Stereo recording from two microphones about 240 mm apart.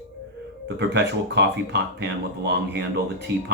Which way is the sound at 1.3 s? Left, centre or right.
Right.